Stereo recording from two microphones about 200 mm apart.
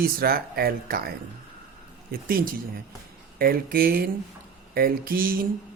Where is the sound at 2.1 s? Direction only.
45° right (ahead or behind).